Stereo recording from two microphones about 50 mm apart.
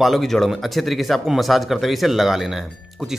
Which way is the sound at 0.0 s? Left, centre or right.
Centre.